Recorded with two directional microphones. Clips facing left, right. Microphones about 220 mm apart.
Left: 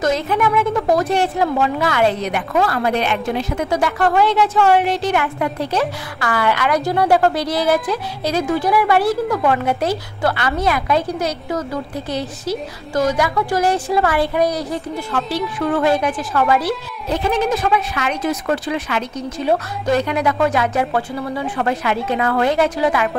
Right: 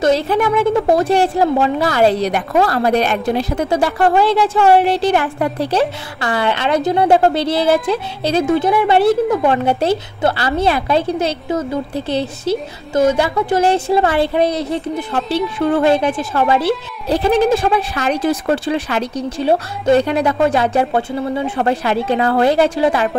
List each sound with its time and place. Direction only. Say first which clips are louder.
0.0 s a woman's voice: right 3 dB; 30° right (ahead or behind)